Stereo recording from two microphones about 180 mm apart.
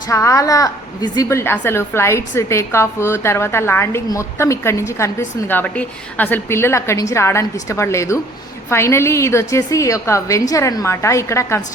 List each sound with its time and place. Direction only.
0.1 s a woman's voice: 15° left (ahead or behind)